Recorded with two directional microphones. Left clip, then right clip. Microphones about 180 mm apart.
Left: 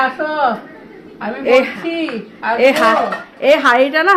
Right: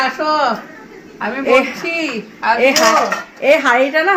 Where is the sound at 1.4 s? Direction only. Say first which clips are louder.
Left 1 dB; 10° left (ahead or behind).